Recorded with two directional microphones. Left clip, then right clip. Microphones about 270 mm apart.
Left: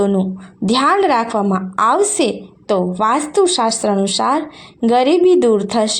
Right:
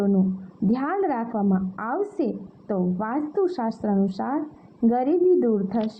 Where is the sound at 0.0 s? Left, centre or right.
Centre.